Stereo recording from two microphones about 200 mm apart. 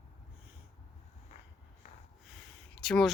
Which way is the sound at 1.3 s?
35° left (ahead or behind).